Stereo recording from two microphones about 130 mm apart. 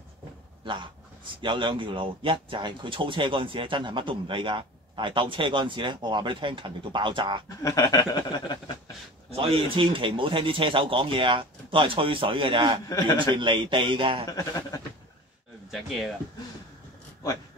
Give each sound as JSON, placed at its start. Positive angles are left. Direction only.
{"t": 0.7, "sound": "speech", "side_deg": -40}
{"t": 7.4, "sound": "speech", "side_deg": 25}
{"t": 9.3, "sound": "speech", "side_deg": -45}
{"t": 12.8, "sound": "a man's voice", "side_deg": 30}
{"t": 13.3, "sound": "speech", "side_deg": -40}
{"t": 14.3, "sound": "speech", "side_deg": 30}
{"t": 15.7, "sound": "speech", "side_deg": 0}